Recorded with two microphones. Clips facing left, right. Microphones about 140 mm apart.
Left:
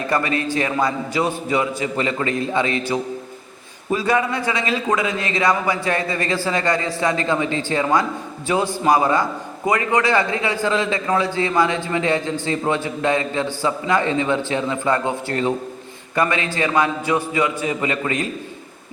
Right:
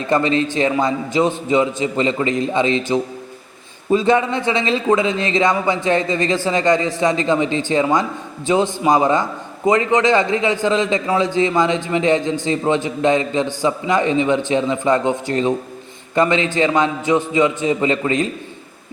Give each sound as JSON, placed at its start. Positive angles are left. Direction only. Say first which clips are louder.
{"t": 0.1, "sound": "a man's voice", "louder": "right 5 dB", "side_deg": -25}